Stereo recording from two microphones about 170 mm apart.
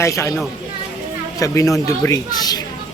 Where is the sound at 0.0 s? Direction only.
20° left (ahead or behind).